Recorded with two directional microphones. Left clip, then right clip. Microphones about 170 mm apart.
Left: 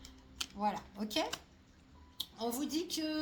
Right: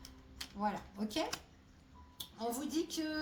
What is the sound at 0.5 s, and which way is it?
Speech, 35° left (ahead or behind).